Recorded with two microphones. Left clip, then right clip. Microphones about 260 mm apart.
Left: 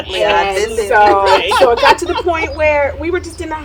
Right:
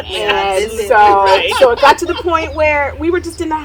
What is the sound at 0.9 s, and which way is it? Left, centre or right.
A woman's voice, centre.